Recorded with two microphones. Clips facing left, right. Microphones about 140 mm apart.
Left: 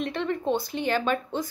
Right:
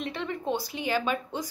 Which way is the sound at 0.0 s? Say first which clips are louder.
Left 4 dB; 5° right (ahead or behind).